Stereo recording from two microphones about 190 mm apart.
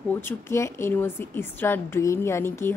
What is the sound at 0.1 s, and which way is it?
A woman's voice, 10° left (ahead or behind).